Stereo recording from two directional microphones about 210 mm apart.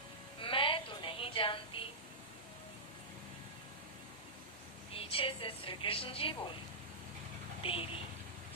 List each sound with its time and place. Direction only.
0.3 s music: 25° left (ahead or behind)
4.9 s a woman's voice: 25° left (ahead or behind)
7.6 s a woman's voice: 25° left (ahead or behind)